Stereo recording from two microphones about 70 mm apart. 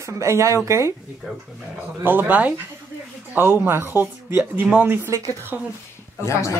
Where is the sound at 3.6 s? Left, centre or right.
Right.